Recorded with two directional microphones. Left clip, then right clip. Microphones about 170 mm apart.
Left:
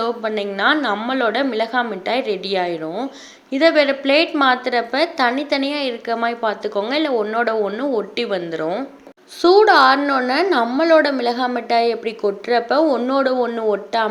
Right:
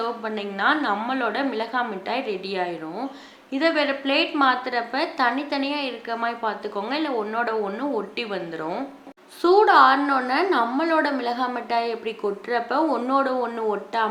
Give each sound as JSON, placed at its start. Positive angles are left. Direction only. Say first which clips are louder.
{"t": 0.0, "sound": "a woman's voice", "louder": "left 6 dB", "side_deg": 35}